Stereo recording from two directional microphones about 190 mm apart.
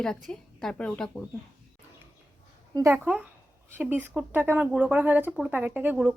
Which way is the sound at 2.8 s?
10° right (ahead or behind).